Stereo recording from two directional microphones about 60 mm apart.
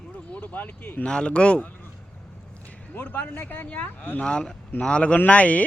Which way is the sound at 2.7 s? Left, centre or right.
Left.